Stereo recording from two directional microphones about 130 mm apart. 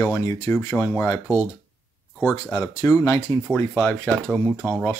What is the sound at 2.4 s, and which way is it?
Speech, 30° left (ahead or behind).